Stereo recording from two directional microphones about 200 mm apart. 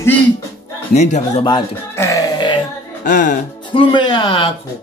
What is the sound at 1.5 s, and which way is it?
Music, 20° left (ahead or behind).